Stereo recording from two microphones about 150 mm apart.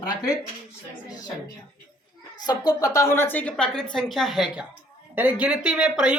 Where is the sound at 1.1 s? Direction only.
25° left (ahead or behind).